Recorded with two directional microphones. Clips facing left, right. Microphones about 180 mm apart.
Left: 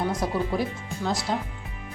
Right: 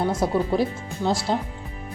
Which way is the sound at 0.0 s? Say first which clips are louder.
Right 4 dB; 30° right (ahead or behind).